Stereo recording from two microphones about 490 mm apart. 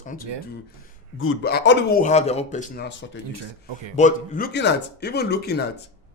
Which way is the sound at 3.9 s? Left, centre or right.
Centre.